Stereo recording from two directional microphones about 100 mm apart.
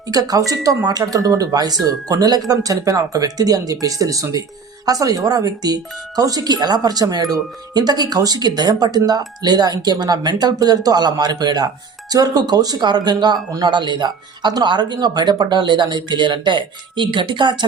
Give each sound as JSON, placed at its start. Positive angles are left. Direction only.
{"t": 0.1, "sound": "speech", "side_deg": -40}